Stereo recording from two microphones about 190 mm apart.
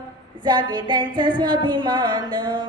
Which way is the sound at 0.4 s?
25° right (ahead or behind).